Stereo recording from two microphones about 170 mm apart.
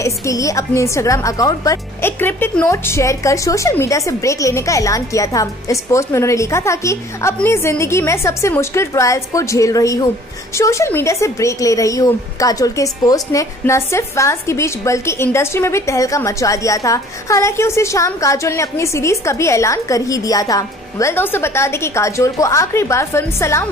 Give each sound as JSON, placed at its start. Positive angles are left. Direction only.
{"t": 0.0, "sound": "a woman's voice", "side_deg": 20}